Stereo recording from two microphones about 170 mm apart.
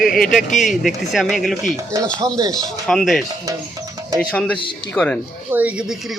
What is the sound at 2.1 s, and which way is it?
Speech, 20° right (ahead or behind).